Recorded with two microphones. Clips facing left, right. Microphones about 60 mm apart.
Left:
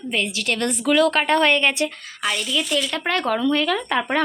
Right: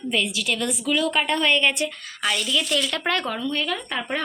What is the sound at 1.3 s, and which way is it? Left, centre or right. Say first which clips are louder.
Speech: left 3 dB; left.